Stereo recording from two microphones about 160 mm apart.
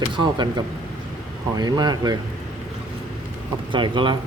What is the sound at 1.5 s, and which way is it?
Speech, 25° right (ahead or behind).